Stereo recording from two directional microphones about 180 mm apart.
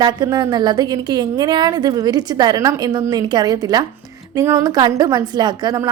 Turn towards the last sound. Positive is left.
turn(degrees=-20)  # may be behind; listen again after turning